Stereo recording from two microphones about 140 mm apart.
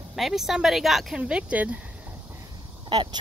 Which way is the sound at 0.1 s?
Centre (ahead or behind).